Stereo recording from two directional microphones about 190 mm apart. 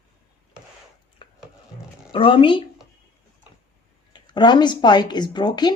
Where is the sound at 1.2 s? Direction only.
25° left (ahead or behind).